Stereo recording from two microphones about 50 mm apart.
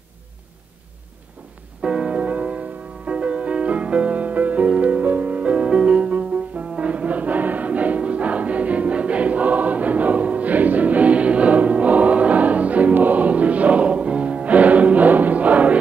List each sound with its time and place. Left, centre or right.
1.8 s music: right
6.8 s choir: right